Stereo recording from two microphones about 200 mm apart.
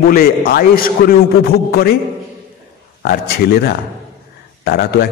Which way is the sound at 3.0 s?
50° left (ahead or behind).